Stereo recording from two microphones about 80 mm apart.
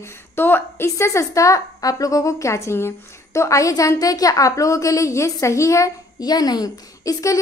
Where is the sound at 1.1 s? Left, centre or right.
Left.